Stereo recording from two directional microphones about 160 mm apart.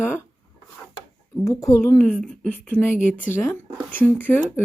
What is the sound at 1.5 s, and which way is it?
Speech, 20° left (ahead or behind).